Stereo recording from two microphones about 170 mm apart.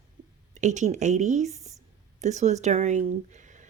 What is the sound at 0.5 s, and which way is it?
Speech, 45° right (ahead or behind).